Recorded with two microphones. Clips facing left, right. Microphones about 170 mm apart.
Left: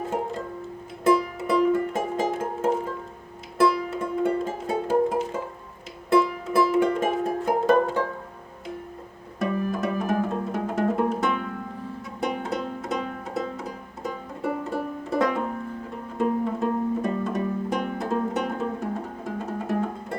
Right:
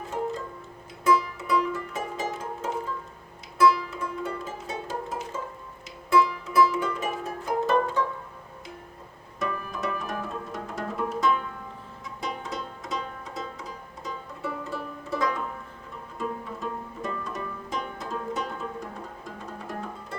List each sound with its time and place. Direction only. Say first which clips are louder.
1.1 s music: left 1 dB; 55° left (ahead or behind)
9.5 s music: left 7 dB; 45° left (ahead or behind)